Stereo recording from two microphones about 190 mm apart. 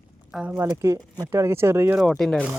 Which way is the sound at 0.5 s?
15° right (ahead or behind).